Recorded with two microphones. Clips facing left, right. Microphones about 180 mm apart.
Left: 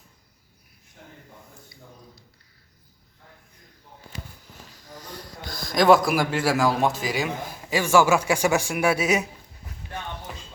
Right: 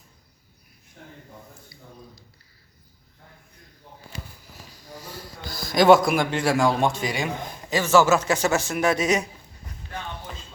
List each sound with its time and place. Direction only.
4.7 s a man's voice: 10° right (ahead or behind); by 9.2 s 10° left (ahead or behind)